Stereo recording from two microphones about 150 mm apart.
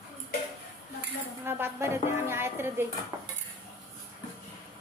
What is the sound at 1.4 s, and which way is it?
A woman's voice, 15° right (ahead or behind).